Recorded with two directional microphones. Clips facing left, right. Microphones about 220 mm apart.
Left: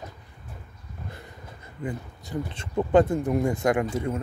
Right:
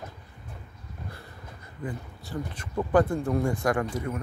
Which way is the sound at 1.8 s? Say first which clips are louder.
Left 3 dB; 20° left (ahead or behind).